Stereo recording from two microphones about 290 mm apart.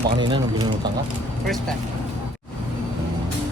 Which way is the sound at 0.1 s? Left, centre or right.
Centre.